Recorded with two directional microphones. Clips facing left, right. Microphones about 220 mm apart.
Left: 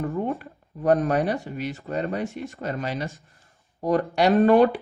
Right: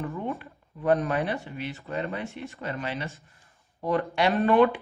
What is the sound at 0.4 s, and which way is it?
Speech, 45° left (ahead or behind).